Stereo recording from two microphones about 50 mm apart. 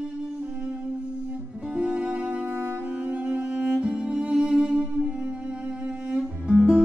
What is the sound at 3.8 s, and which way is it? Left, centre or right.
Music, centre.